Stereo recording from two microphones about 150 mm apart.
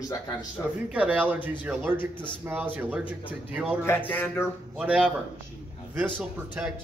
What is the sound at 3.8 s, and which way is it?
Speech, 15° left (ahead or behind).